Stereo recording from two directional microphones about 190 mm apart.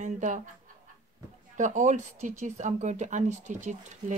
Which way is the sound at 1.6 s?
40° right (ahead or behind).